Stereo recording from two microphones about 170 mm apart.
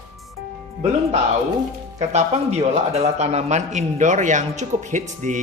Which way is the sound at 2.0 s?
40° right (ahead or behind).